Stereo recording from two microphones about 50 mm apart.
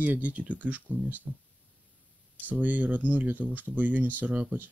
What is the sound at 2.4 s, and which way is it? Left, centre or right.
Speech, right.